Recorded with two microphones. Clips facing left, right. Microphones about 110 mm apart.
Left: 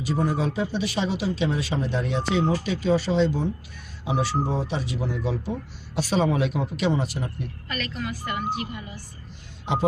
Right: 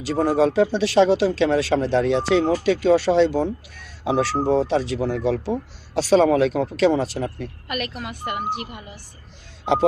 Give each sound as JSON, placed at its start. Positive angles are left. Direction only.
{"t": 0.0, "sound": "a man's voice", "side_deg": -90}